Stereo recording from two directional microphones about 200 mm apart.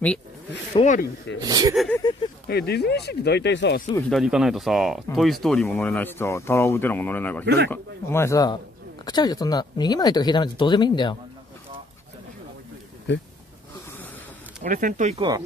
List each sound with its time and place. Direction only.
0.7 s speech: 40° left (ahead or behind)
1.4 s speech: 20° right (ahead or behind)
2.1 s speech: 20° left (ahead or behind)
2.4 s speech: 55° left (ahead or behind)
4.1 s speech: centre (ahead or behind)
7.4 s speech: 55° right (ahead or behind)
7.7 s speech: 10° left (ahead or behind)
14.6 s speech: 40° right (ahead or behind)